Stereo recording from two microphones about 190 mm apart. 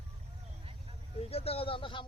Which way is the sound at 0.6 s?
30° right (ahead or behind).